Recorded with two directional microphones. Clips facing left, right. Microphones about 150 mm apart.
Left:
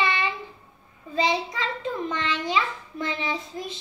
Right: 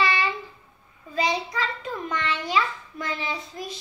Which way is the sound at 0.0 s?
20° left (ahead or behind).